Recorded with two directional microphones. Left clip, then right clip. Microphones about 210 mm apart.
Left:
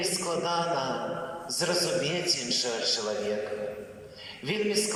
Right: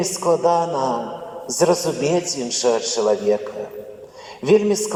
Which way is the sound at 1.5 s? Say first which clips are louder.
Right 10 dB; 55° right (ahead or behind).